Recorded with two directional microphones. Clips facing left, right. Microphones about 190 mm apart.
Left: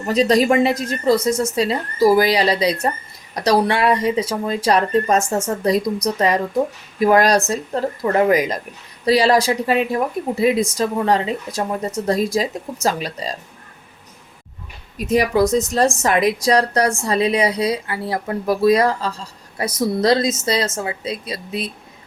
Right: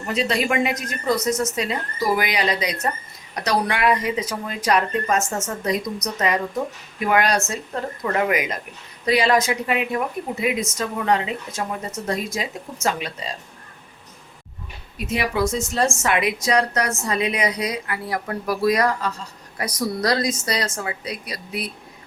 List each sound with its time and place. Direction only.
0.0 s speech: 40° left (ahead or behind)
14.9 s a woman's voice: 40° left (ahead or behind); by 21.7 s 25° left (ahead or behind)